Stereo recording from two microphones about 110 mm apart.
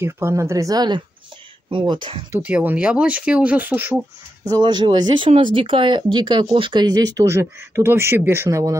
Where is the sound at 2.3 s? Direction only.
15° right (ahead or behind).